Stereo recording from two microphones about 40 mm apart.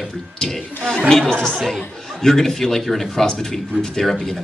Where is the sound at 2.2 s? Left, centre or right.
Centre.